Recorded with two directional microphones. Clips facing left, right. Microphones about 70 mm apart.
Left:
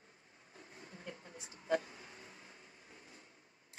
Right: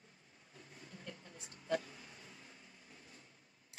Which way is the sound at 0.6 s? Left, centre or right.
Left.